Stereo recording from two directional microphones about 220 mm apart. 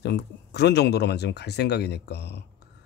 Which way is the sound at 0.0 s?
50° left (ahead or behind).